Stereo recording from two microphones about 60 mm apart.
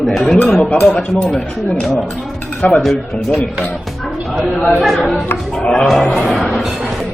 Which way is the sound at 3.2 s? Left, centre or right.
Centre.